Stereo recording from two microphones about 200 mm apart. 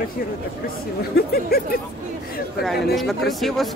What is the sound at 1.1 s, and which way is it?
Speech, 50° left (ahead or behind).